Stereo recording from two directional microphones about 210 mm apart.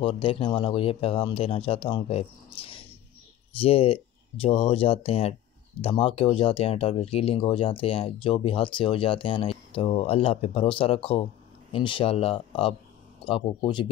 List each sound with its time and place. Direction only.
0.0 s speech: 25° left (ahead or behind)